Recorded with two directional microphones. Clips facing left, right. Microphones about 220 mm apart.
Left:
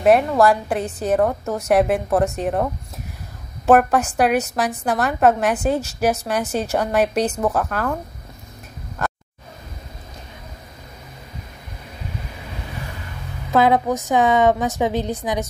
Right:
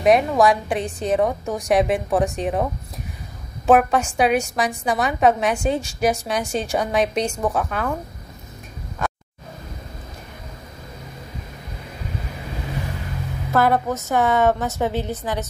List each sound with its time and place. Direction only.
0.0 s a woman's voice: centre (ahead or behind)
13.5 s a woman's voice: 15° left (ahead or behind)